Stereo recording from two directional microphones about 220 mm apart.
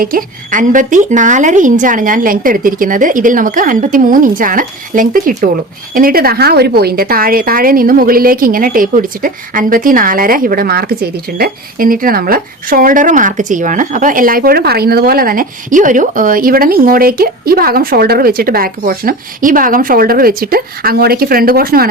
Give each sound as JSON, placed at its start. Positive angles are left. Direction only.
{"t": 0.0, "sound": "a woman's voice", "side_deg": -40}